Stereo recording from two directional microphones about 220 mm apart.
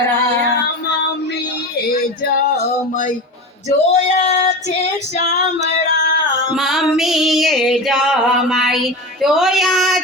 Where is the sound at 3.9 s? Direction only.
30° left (ahead or behind).